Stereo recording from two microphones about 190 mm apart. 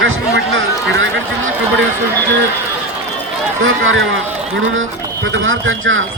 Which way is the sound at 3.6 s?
90° right.